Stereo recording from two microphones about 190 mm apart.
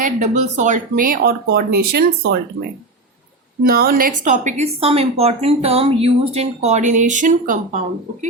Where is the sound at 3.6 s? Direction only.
50° right (ahead or behind).